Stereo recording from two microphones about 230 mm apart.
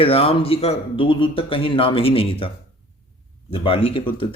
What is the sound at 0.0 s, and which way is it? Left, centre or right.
Speech, left.